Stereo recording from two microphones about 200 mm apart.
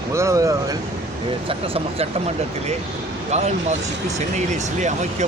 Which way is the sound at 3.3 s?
35° right (ahead or behind).